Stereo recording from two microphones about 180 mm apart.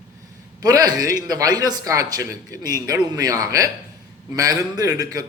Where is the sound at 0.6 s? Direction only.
20° right (ahead or behind).